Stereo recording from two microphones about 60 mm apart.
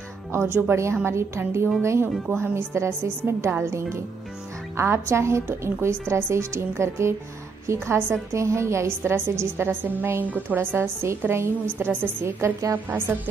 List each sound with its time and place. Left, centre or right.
0.3 s a woman's voice: right
10.2 s a woman's voice: right
10.6 s a woman's voice: right